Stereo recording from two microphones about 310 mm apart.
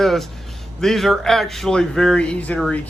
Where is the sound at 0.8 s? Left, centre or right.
Centre.